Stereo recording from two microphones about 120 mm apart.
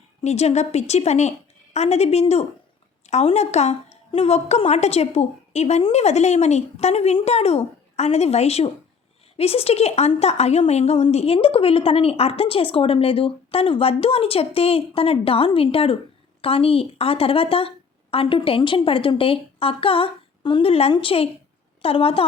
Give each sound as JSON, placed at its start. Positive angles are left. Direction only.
{"t": 0.2, "sound": "a woman's voice", "side_deg": 60}